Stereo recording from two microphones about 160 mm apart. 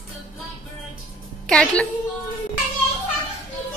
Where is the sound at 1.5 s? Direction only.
5° left (ahead or behind).